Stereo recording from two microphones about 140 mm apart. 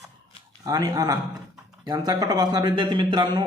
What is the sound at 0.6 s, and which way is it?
A man's voice, 25° right (ahead or behind).